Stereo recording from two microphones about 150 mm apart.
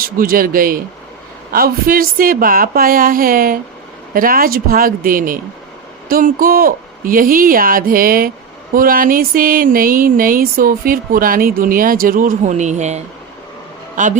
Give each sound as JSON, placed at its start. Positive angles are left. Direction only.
{"t": 0.0, "sound": "speech", "side_deg": -75}
{"t": 14.0, "sound": "a man's voice", "side_deg": -55}